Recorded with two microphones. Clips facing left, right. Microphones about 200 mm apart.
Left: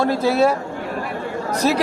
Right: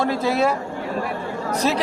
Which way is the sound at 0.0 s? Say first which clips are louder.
Left 3 dB; 10° left (ahead or behind).